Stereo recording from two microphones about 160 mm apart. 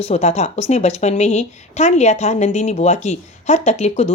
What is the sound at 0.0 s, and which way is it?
A woman's voice, 40° left (ahead or behind).